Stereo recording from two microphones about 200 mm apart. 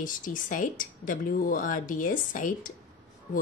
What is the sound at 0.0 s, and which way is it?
Speech, 40° left (ahead or behind).